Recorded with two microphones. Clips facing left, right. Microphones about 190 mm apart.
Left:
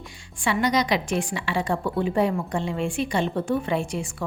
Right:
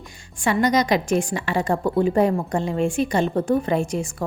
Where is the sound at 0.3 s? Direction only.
45° right (ahead or behind).